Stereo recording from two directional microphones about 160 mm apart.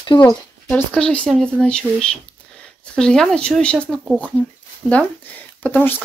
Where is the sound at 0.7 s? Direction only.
5° left (ahead or behind).